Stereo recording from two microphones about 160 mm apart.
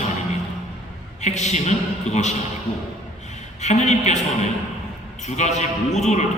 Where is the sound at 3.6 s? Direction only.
45° left (ahead or behind).